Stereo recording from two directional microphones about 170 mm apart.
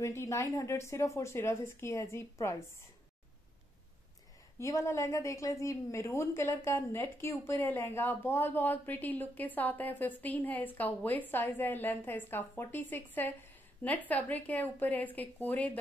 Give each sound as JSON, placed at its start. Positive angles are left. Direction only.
{"t": 0.0, "sound": "a woman's voice", "side_deg": 15}
{"t": 4.6, "sound": "a woman's voice", "side_deg": 15}